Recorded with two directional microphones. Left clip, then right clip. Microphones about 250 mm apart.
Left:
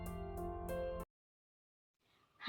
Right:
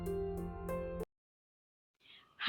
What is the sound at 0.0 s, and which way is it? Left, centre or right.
Music, centre.